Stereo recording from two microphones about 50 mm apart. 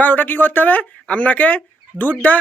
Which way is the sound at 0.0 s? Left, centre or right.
Left.